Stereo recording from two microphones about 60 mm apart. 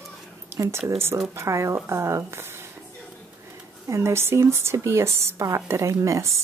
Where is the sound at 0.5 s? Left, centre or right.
Right.